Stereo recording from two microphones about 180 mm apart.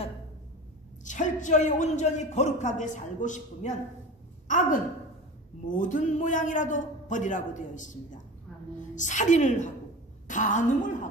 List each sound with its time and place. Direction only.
1.0 s a man's voice: 45° left (ahead or behind)
5.8 s a man's voice: 45° left (ahead or behind)